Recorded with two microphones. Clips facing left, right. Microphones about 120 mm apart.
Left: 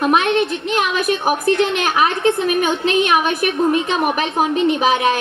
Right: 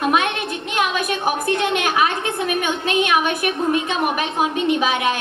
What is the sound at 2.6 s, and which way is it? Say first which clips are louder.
Speech: left 3 dB; 35° left (ahead or behind).